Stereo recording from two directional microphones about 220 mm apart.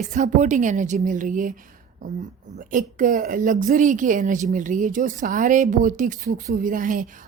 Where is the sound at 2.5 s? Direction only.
35° right (ahead or behind).